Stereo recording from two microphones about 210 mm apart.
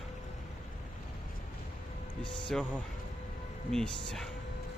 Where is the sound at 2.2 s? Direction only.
20° left (ahead or behind).